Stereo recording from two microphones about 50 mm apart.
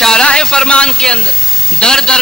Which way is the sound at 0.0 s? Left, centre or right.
Centre.